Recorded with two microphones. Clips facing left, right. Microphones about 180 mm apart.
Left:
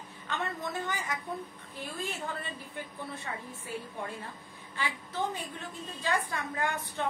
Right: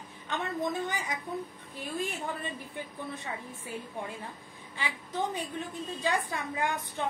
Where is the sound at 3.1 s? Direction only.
15° right (ahead or behind).